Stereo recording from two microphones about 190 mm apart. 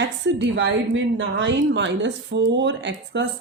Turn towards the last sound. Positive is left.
turn(degrees=-70)  # may be behind; listen again after turning